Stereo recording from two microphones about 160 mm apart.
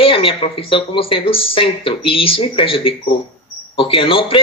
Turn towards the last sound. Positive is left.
turn(degrees=35)  # may be behind; listen again after turning